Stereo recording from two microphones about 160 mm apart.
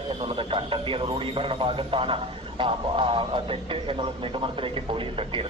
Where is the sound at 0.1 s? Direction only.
35° right (ahead or behind).